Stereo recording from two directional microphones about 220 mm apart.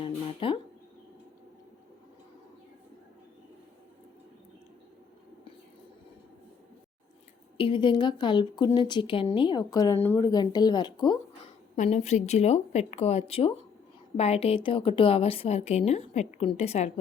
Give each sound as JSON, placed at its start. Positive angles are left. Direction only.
{"t": 0.0, "sound": "a sound", "side_deg": 25}
{"t": 7.5, "sound": "speech", "side_deg": 25}
{"t": 11.8, "sound": "speech", "side_deg": 30}